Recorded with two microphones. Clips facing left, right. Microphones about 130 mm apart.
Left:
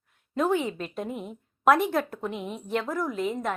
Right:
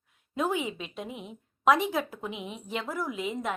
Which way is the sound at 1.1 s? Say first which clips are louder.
Left 6 dB; 45° left (ahead or behind).